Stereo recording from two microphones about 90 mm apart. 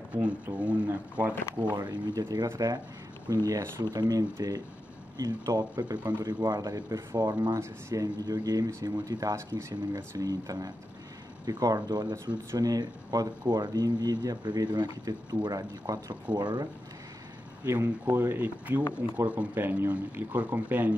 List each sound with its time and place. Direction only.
0.1 s speech: 20° right (ahead or behind)
1.8 s speech: 45° right (ahead or behind)
17.6 s speech: 30° right (ahead or behind)